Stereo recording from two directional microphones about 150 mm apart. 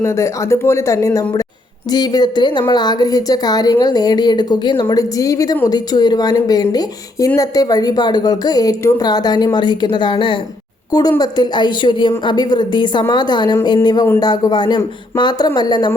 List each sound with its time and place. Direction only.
0.0 s a woman's voice: 20° left (ahead or behind)